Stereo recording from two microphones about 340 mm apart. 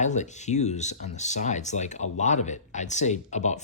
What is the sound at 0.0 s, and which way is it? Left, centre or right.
Speech, left.